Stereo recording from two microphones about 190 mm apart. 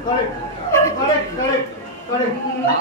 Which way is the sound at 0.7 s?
15° left (ahead or behind).